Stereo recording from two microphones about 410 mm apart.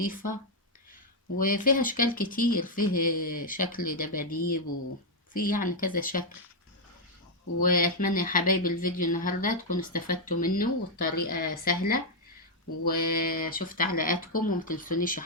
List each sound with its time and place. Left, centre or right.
0.0 s speech: centre
1.4 s speech: centre
7.6 s speech: centre